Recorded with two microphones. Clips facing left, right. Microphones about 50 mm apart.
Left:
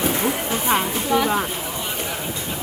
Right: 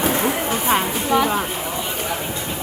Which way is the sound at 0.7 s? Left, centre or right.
Centre.